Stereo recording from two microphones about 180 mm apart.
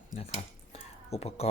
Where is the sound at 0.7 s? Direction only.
35° left (ahead or behind).